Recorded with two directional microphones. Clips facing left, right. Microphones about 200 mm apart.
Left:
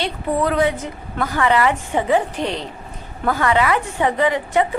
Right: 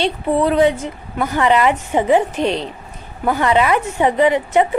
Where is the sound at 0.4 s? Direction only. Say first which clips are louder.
Right 5 dB; 20° right (ahead or behind).